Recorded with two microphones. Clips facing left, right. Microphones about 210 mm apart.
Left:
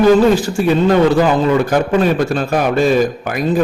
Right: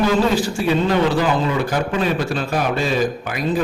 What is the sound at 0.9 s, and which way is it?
A man's voice, 50° left (ahead or behind).